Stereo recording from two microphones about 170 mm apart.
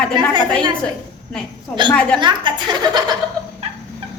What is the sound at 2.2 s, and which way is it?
Speech, 25° right (ahead or behind).